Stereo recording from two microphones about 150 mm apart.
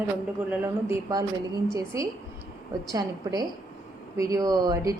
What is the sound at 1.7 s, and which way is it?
Speech, 20° right (ahead or behind).